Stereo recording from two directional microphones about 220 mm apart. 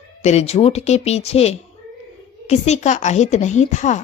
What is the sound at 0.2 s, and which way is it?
A woman's voice, 30° left (ahead or behind).